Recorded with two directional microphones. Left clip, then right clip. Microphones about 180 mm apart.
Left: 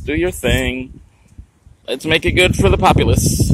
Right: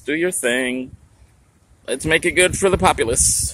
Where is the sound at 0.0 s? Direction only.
10° left (ahead or behind).